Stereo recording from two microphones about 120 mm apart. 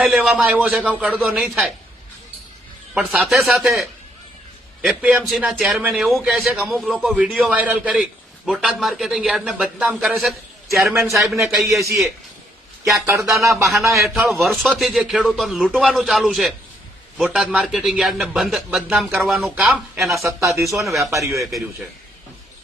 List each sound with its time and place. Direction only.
0.0 s a man's voice: 5° right (ahead or behind)
2.9 s a man's voice: 10° right (ahead or behind)
11.6 s a man's voice: 25° right (ahead or behind)
12.8 s a man's voice: centre (ahead or behind)
21.0 s a man's voice: 25° right (ahead or behind)